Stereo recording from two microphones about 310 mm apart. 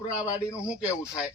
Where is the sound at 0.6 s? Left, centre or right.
Centre.